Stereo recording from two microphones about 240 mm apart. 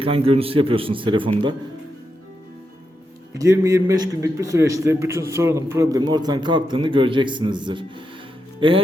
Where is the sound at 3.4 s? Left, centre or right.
Centre.